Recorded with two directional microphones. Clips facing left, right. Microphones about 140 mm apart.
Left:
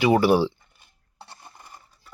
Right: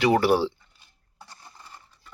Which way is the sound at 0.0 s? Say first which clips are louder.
Left 2 dB; 5° left (ahead or behind).